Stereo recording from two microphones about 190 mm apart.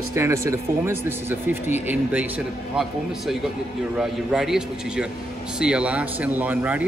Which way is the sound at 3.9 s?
5° right (ahead or behind).